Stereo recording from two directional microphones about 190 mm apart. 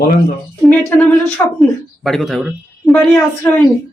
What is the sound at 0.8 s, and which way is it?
A woman's voice, 5° left (ahead or behind).